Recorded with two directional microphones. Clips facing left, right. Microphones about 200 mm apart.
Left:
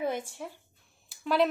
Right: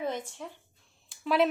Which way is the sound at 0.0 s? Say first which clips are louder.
Left 2 dB; 10° left (ahead or behind).